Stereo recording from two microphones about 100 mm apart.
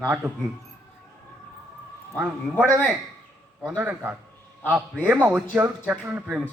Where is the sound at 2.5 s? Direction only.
20° left (ahead or behind).